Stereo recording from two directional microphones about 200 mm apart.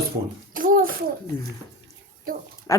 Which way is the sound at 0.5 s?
45° right (ahead or behind).